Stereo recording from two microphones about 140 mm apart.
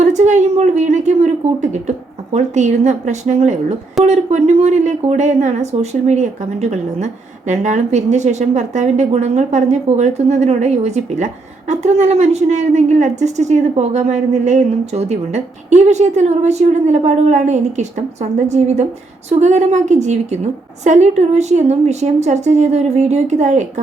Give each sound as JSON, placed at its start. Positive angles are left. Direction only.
{"t": 0.0, "sound": "a woman's voice", "side_deg": -55}